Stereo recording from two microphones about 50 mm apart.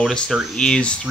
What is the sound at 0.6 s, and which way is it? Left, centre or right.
Speech, centre.